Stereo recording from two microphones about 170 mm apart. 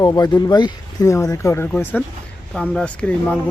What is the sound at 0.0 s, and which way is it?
Speech, 20° left (ahead or behind).